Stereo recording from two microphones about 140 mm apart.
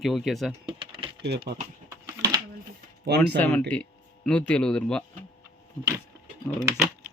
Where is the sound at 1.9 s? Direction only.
25° right (ahead or behind).